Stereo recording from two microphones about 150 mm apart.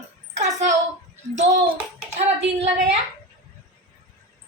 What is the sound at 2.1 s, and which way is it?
Speech, 45° right (ahead or behind).